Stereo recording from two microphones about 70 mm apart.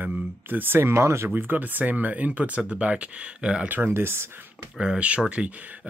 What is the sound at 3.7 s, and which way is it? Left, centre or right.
Speech, right.